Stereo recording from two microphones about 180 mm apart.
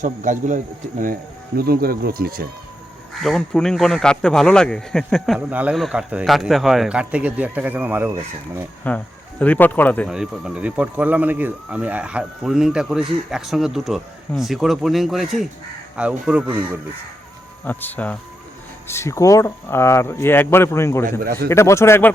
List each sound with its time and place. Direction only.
0.0 s speech: 45° right (ahead or behind)
1.5 s speech: 60° right (ahead or behind)
3.2 s a man's voice: centre (ahead or behind); by 8.6 s 15° right (ahead or behind)
8.9 s speech: 10° left (ahead or behind)
10.1 s a man's voice: 5° right (ahead or behind)
17.7 s speech: 10° left (ahead or behind)